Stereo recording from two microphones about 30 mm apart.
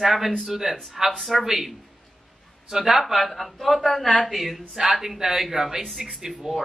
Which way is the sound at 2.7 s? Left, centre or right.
Centre.